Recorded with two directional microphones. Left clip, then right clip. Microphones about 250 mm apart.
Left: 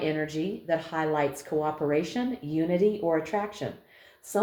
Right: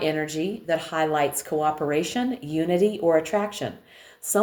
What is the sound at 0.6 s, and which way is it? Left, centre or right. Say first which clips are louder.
Speech: right 4 dB; right.